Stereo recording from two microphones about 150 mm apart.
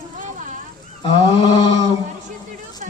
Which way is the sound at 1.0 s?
35° left (ahead or behind).